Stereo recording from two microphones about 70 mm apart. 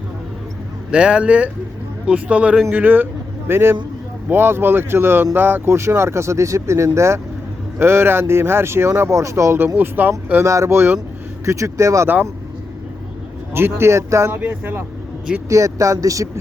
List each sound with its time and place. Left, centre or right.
0.9 s speech: centre
2.7 s speech: right
9.7 s speech: right
10.4 s speech: right
13.5 s speech: right
14.3 s speech: right
15.4 s speech: right